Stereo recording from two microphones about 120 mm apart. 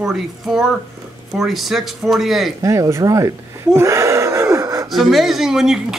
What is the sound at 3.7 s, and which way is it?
Gasp, 25° right (ahead or behind).